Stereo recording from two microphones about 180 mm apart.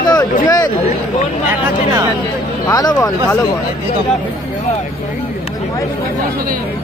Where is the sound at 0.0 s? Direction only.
25° left (ahead or behind).